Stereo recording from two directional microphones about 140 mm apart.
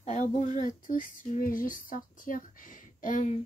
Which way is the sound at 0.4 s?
65° left (ahead or behind).